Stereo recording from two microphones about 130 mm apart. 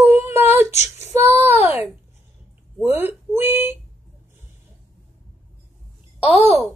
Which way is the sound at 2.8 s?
20° right (ahead or behind).